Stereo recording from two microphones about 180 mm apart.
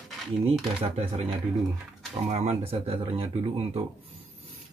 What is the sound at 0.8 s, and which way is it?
Speech, 30° right (ahead or behind).